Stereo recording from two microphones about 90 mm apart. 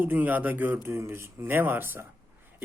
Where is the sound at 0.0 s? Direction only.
20° right (ahead or behind).